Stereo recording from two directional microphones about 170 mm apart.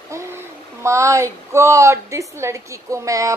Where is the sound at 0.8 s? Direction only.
15° right (ahead or behind).